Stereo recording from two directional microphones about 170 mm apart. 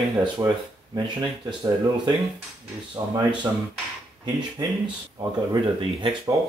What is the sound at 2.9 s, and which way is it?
Speech, 25° right (ahead or behind).